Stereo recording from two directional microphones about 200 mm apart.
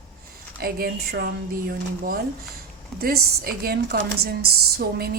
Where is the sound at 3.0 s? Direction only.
50° right (ahead or behind).